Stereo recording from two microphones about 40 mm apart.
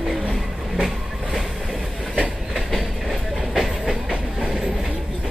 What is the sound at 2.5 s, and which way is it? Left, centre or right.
Train, centre.